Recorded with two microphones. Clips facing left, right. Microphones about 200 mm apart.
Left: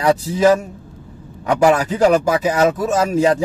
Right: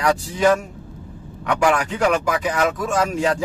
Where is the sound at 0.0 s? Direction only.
25° left (ahead or behind).